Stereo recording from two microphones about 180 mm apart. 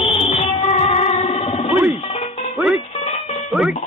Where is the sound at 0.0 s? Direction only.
30° left (ahead or behind).